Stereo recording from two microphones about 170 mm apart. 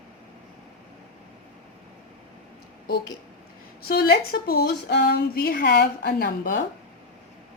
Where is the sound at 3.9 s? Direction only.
65° left (ahead or behind).